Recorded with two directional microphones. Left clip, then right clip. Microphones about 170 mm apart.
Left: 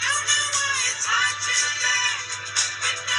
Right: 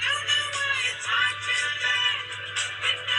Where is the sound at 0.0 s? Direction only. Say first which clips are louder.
Left 2 dB; 40° left (ahead or behind).